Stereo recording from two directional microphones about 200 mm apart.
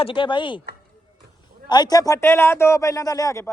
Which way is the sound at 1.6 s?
20° left (ahead or behind).